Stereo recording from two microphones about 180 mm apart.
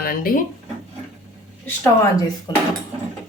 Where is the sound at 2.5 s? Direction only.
25° left (ahead or behind).